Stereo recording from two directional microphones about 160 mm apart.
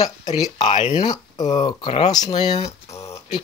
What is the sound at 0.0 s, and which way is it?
Speech, 25° left (ahead or behind).